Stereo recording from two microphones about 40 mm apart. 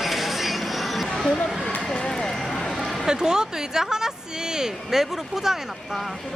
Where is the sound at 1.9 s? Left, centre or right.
Centre.